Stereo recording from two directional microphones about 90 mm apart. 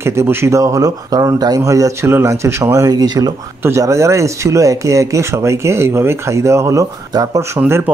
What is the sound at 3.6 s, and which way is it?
Speech, 30° right (ahead or behind).